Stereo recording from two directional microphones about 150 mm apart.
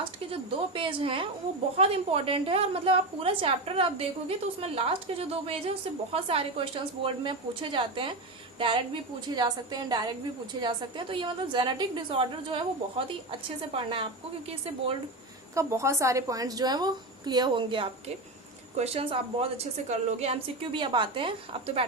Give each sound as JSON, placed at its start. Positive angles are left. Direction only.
{"t": 0.0, "sound": "a woman's voice", "side_deg": -35}
{"t": 9.2, "sound": "a woman's voice", "side_deg": -30}
{"t": 15.5, "sound": "a woman's voice", "side_deg": -20}